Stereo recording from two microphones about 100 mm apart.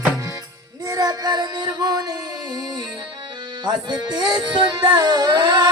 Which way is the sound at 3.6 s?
45° right (ahead or behind).